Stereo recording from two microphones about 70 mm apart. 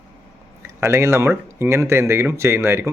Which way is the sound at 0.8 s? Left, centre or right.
Right.